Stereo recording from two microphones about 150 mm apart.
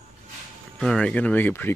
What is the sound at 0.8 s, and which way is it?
Speech, 5° left (ahead or behind).